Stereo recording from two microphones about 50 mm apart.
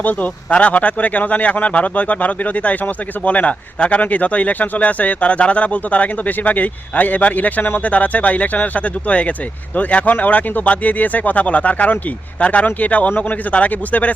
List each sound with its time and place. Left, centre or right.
0.0 s speech: left